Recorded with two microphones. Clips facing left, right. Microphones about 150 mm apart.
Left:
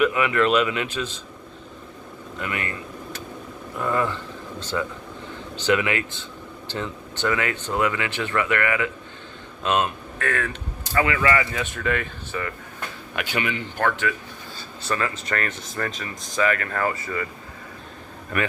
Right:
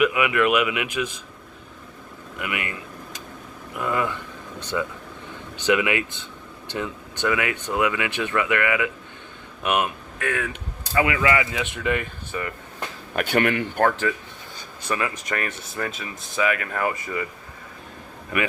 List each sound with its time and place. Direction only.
0.0 s speech: 10° right (ahead or behind)
2.4 s speech: 15° right (ahead or behind)
5.5 s speech: 20° right (ahead or behind)
13.1 s speech: 55° right (ahead or behind)
14.8 s speech: 15° right (ahead or behind)